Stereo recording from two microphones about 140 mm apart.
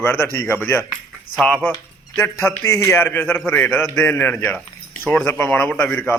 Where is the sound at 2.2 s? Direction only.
20° left (ahead or behind).